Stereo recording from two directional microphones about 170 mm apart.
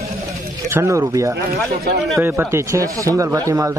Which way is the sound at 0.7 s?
15° right (ahead or behind).